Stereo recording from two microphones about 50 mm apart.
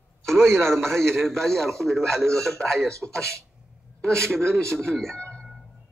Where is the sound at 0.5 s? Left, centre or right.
Centre.